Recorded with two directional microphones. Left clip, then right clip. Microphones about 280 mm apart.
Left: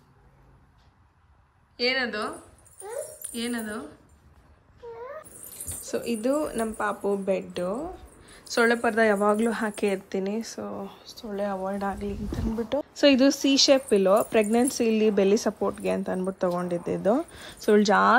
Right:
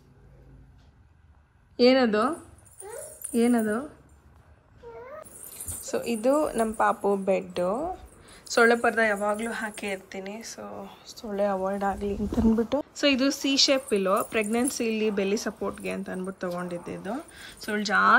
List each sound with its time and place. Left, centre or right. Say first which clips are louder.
1.8 s speech: right 6 dB; centre
2.8 s dog: left 5 dB; centre
5.4 s speech: even; centre
12.7 s speech: left 4 dB; centre